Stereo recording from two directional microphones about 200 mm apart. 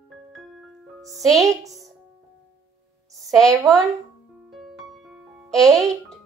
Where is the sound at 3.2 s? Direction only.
Centre (ahead or behind).